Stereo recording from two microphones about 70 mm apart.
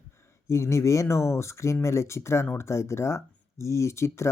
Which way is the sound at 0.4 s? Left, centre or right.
Left.